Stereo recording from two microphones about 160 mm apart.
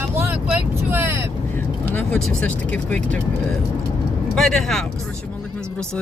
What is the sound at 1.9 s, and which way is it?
Speech, 10° left (ahead or behind).